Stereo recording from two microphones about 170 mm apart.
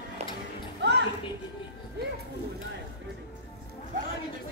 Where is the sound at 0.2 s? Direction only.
40° right (ahead or behind).